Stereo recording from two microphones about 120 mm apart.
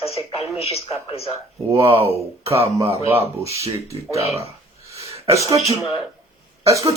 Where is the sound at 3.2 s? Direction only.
60° left (ahead or behind).